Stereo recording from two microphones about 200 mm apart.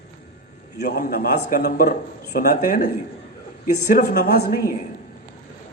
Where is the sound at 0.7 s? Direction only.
50° left (ahead or behind).